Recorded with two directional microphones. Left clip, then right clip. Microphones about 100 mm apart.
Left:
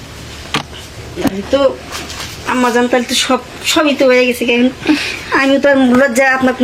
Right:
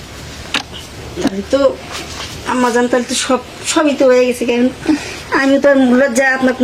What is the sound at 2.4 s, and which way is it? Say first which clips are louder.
A woman's voice: left 1 dB; 5° right (ahead or behind).